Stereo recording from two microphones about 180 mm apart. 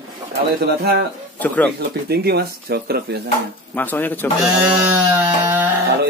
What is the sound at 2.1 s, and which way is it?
Speech, 60° right (ahead or behind).